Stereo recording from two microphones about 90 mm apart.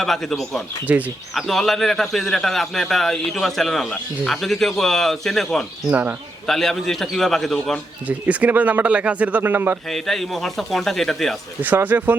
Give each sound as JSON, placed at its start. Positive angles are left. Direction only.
{"t": 0.0, "sound": "a man's voice", "side_deg": 5}
{"t": 0.9, "sound": "speech", "side_deg": -15}
{"t": 1.3, "sound": "a man's voice", "side_deg": 0}
{"t": 5.9, "sound": "speech", "side_deg": -20}
{"t": 6.5, "sound": "a man's voice", "side_deg": 5}
{"t": 8.0, "sound": "speech", "side_deg": -15}
{"t": 9.9, "sound": "a man's voice", "side_deg": 0}
{"t": 11.6, "sound": "speech", "side_deg": -20}